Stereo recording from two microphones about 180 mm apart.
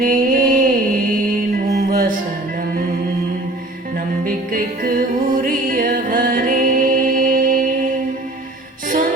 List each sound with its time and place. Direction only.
0.0 s a sound: 50° right (ahead or behind)
1.9 s music: 55° right (ahead or behind)
4.2 s music: 50° right (ahead or behind)